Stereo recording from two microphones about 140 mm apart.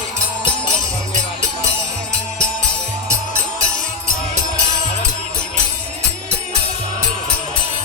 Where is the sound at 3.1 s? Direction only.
55° right (ahead or behind).